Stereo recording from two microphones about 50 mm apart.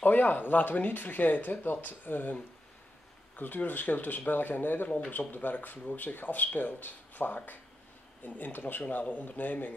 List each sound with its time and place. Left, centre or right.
0.0 s speech: left
3.3 s speech: left
4.8 s speech: left
5.3 s speech: left